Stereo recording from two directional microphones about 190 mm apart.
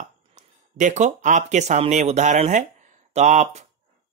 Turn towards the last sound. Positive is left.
turn(degrees=-35)  # may be behind; listen again after turning